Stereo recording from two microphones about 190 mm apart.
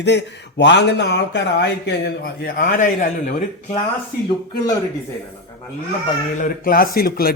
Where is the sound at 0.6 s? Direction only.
65° left (ahead or behind); by 3.3 s 45° left (ahead or behind).